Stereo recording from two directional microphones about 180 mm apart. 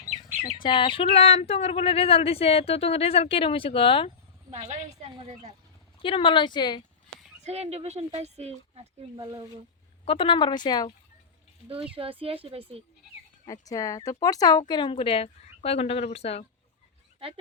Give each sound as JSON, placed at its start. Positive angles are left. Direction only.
{"t": 0.6, "sound": "speech", "side_deg": 30}
{"t": 4.5, "sound": "speech", "side_deg": -35}
{"t": 6.0, "sound": "speech", "side_deg": 30}
{"t": 7.4, "sound": "speech", "side_deg": -35}
{"t": 10.1, "sound": "speech", "side_deg": 30}
{"t": 11.7, "sound": "speech", "side_deg": -30}
{"t": 13.4, "sound": "speech", "side_deg": 20}